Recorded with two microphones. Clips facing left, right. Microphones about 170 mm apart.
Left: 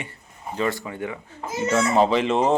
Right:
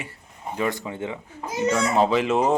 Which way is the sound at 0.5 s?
15° right (ahead or behind).